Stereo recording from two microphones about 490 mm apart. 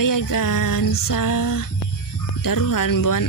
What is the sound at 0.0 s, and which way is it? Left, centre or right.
Music, left.